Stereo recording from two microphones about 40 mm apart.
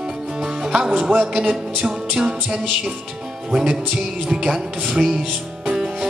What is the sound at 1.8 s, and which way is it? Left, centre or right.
Music, centre.